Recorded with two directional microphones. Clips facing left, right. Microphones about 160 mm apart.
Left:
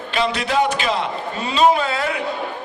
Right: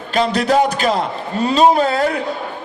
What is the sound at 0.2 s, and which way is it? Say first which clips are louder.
A man's voice: right 5 dB; 40° right (ahead or behind).